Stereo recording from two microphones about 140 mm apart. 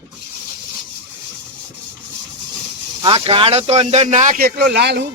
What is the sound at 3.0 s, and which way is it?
A man's voice, 40° right (ahead or behind).